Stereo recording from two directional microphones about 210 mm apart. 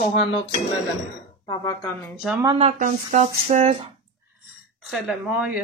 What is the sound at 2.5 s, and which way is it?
Speech, 35° right (ahead or behind).